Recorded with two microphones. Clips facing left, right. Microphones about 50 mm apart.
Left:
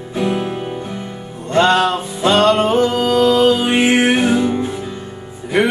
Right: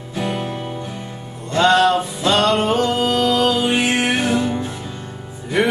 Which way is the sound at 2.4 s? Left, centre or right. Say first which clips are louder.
Left 5 dB; centre.